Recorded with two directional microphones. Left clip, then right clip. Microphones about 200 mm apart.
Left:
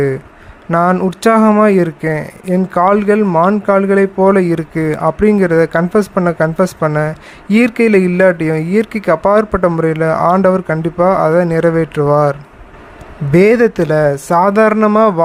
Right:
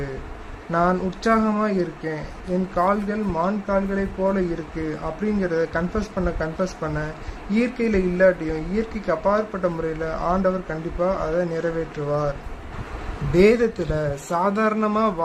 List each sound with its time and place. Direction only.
0.7 s speech: 40° left (ahead or behind)
13.3 s speech: 40° left (ahead or behind)